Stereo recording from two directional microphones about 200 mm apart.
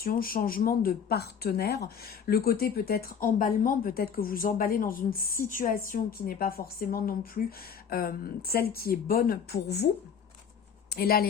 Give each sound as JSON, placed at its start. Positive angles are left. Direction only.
{"t": 0.0, "sound": "speech", "side_deg": 45}